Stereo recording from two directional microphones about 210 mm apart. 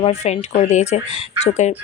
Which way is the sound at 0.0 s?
30° left (ahead or behind).